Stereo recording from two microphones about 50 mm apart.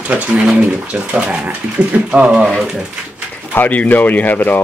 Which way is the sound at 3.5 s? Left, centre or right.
Left.